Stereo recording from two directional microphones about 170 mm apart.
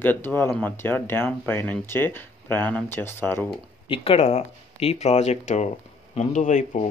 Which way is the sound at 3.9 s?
35° left (ahead or behind).